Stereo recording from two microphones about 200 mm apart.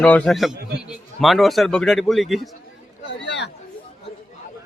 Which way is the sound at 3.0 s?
60° left (ahead or behind).